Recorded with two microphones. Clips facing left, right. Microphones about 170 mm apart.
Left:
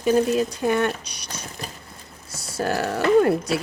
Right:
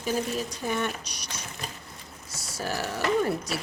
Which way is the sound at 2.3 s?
60° left (ahead or behind).